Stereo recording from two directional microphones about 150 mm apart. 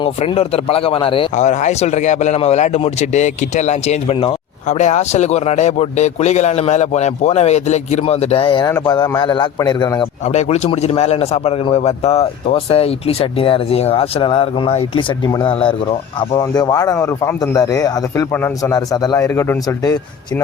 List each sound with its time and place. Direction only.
0.0 s a man's voice: 40° left (ahead or behind)
1.4 s a man's voice: 50° left (ahead or behind); by 10.1 s 30° left (ahead or behind)
10.2 s a man's voice: 50° left (ahead or behind)
16.4 s speech: 25° left (ahead or behind)